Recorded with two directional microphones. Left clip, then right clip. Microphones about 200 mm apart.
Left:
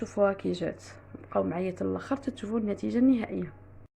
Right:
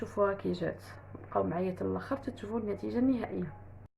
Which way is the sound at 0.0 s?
25° left (ahead or behind).